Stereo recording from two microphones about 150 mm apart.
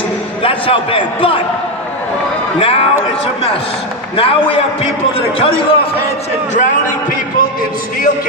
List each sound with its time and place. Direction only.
0.4 s a man's voice: 40° left (ahead or behind)
2.6 s a man's voice: 40° left (ahead or behind)
4.2 s a man's voice: 40° left (ahead or behind)
6.5 s speech: 55° left (ahead or behind)